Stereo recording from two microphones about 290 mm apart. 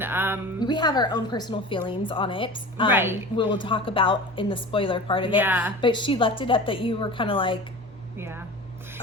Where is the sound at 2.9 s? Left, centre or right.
Centre.